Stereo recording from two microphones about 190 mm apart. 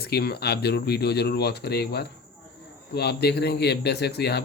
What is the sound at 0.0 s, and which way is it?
Speech, 55° left (ahead or behind).